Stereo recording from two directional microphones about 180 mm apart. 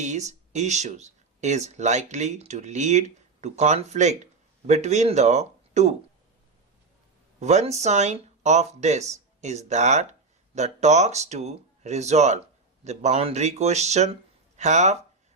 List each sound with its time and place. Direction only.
0.0 s speech: 40° right (ahead or behind)
7.3 s speech: 40° right (ahead or behind)